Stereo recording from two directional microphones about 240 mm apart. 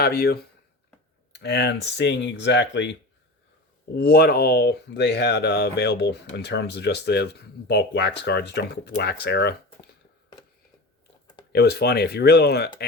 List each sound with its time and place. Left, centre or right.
0.0 s speech: left
3.9 s speech: left
11.5 s speech: left